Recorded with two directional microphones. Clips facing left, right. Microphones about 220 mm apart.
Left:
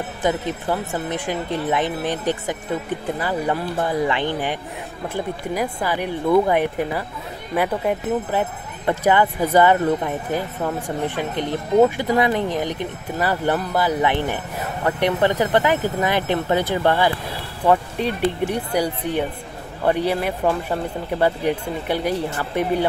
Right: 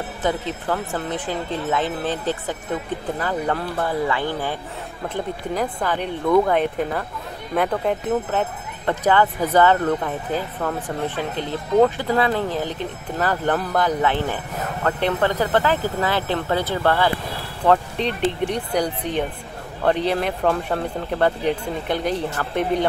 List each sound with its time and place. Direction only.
0.2 s speech: 15° left (ahead or behind)
5.0 s speech: 10° left (ahead or behind)